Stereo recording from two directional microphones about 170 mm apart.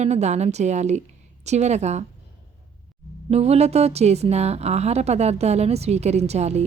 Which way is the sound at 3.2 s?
40° right (ahead or behind).